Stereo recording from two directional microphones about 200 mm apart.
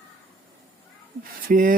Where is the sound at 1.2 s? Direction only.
45° right (ahead or behind).